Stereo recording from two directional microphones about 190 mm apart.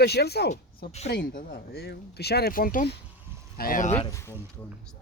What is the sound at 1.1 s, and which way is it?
Speech, 50° left (ahead or behind).